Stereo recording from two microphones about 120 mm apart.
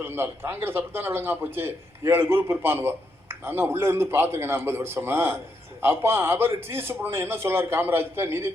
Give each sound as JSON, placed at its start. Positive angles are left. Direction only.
{"t": 0.0, "sound": "a man's voice", "side_deg": -20}